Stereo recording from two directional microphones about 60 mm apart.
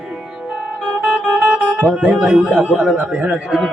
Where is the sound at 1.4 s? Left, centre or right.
Centre.